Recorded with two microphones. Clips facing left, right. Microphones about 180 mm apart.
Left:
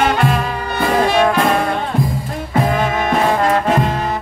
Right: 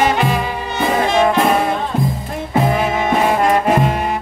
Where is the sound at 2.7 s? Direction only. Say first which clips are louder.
Even; 10° right (ahead or behind).